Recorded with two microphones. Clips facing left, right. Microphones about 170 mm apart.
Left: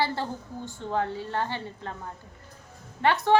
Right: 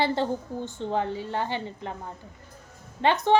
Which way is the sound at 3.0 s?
20° right (ahead or behind).